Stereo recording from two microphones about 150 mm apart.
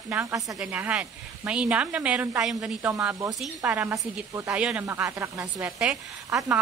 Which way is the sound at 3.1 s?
20° right (ahead or behind).